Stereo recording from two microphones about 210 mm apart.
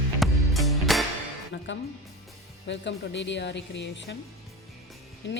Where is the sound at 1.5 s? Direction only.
60° left (ahead or behind).